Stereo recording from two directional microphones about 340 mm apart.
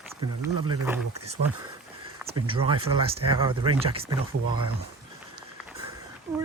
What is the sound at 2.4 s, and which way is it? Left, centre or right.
Speech, centre.